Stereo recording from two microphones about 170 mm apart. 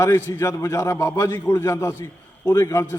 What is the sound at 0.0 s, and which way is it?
A man's voice, 15° left (ahead or behind).